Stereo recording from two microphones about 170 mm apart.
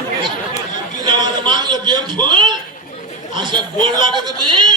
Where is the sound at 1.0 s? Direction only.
25° right (ahead or behind).